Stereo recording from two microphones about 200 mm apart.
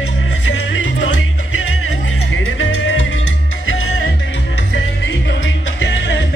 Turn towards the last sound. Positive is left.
turn(degrees=65)  # may be behind; listen again after turning